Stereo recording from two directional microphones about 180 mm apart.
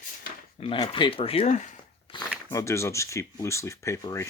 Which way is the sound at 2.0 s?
25° left (ahead or behind).